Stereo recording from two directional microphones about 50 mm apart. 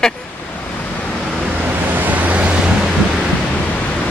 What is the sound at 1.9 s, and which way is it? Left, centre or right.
Vehicle, right.